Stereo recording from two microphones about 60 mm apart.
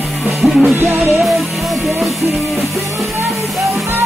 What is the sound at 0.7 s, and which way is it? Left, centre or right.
Music, right.